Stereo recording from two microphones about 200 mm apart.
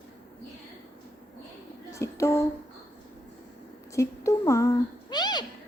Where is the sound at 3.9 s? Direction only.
15° left (ahead or behind).